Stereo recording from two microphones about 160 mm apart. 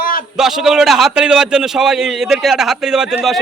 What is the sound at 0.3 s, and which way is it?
A man's voice, centre (ahead or behind).